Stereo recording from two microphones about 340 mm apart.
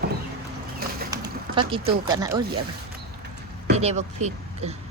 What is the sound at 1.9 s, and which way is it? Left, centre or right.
Speech, centre.